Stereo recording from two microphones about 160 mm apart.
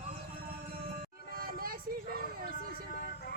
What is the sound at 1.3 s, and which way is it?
Music, 65° right (ahead or behind).